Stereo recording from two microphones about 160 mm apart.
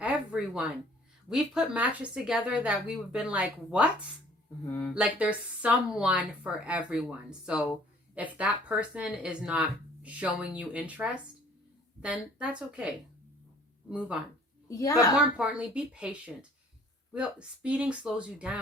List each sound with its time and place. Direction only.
0.0 s a sound: 5° right (ahead or behind)
1.3 s speech: 5° right (ahead or behind)
4.6 s speech: 15° left (ahead or behind)
4.9 s speech: 10° right (ahead or behind)
13.9 s speech: 5° right (ahead or behind)
14.7 s a woman's voice: 20° left (ahead or behind)
15.4 s speech: 10° right (ahead or behind)